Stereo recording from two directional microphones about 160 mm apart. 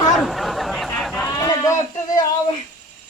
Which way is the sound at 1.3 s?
20° left (ahead or behind).